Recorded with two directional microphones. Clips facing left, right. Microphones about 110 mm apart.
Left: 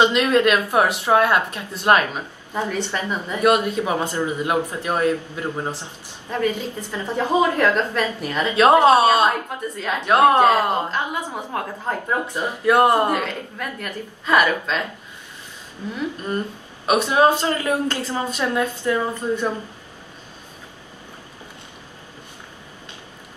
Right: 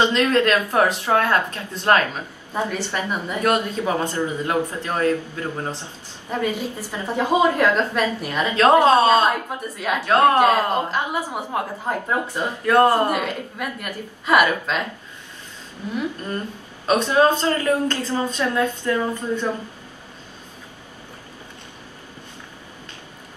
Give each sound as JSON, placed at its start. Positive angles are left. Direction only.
{"t": 0.0, "sound": "speech", "side_deg": 15}
{"t": 2.5, "sound": "a woman's voice", "side_deg": -10}
{"t": 3.3, "sound": "speech", "side_deg": 15}
{"t": 6.3, "sound": "a woman's voice", "side_deg": -15}
{"t": 8.5, "sound": "speech", "side_deg": 15}
{"t": 10.9, "sound": "a woman's voice", "side_deg": -10}
{"t": 12.4, "sound": "speech", "side_deg": 15}
{"t": 13.1, "sound": "a woman's voice", "side_deg": -10}
{"t": 16.8, "sound": "speech", "side_deg": 15}